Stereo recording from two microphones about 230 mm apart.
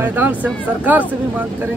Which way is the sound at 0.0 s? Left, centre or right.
Centre.